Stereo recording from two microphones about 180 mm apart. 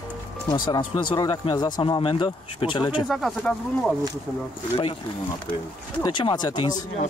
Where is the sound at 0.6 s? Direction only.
25° left (ahead or behind).